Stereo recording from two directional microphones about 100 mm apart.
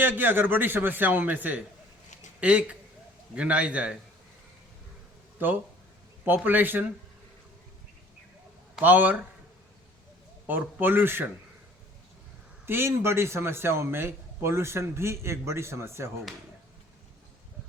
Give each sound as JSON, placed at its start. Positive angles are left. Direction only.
{"t": 0.0, "sound": "a man's voice", "side_deg": -20}
{"t": 6.2, "sound": "a man's voice", "side_deg": -20}
{"t": 8.8, "sound": "a man's voice", "side_deg": -15}
{"t": 10.4, "sound": "a man's voice", "side_deg": -20}
{"t": 12.6, "sound": "a man's voice", "side_deg": -25}